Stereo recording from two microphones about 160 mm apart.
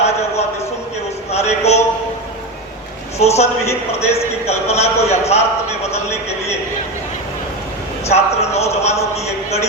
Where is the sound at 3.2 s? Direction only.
40° left (ahead or behind).